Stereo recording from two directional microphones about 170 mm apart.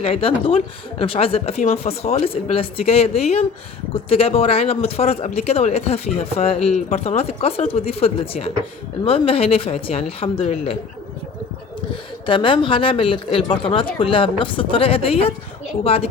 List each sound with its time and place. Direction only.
0.0 s speech: 35° left (ahead or behind)
12.2 s speech: 30° left (ahead or behind)